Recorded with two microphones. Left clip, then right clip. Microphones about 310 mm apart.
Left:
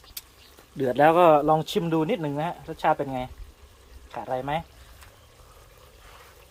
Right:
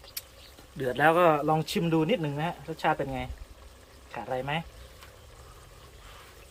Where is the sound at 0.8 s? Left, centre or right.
Left.